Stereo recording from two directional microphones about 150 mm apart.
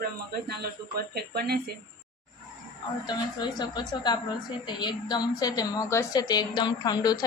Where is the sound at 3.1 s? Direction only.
30° left (ahead or behind).